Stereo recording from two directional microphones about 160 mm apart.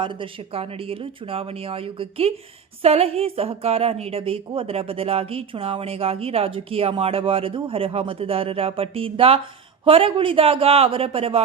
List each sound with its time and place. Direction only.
0.5 s a woman's voice: 35° right (ahead or behind)